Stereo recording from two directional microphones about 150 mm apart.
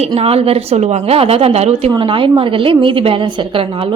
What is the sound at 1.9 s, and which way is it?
A woman's voice, 35° right (ahead or behind).